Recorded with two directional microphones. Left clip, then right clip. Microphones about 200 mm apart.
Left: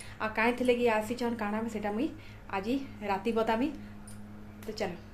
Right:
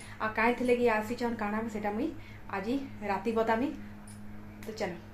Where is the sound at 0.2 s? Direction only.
20° left (ahead or behind).